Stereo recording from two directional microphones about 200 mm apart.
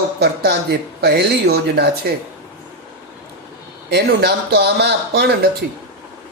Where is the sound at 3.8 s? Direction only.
55° right (ahead or behind).